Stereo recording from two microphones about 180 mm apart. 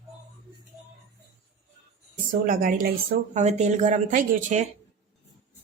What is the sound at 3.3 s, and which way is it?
Speech, 40° right (ahead or behind).